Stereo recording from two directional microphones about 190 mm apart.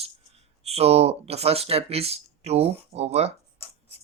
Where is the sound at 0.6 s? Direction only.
35° right (ahead or behind).